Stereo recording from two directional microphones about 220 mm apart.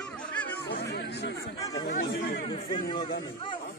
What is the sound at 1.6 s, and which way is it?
Chatter, 15° left (ahead or behind).